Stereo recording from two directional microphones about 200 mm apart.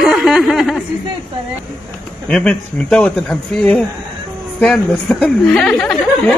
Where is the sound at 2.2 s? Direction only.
5° left (ahead or behind).